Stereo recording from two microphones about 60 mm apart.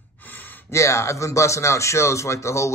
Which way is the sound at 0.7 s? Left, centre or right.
Left.